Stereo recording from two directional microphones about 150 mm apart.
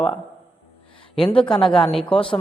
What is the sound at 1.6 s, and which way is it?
Speech, 5° left (ahead or behind).